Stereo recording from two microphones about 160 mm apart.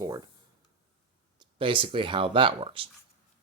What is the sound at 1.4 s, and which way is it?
Speech, 35° right (ahead or behind).